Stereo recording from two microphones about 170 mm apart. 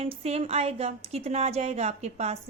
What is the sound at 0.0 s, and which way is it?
Speech, 35° right (ahead or behind).